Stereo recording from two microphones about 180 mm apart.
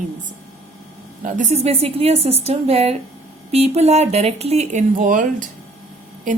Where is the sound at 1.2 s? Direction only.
40° right (ahead or behind).